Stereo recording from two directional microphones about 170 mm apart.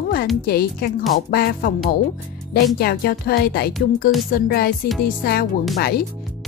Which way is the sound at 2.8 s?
65° left (ahead or behind).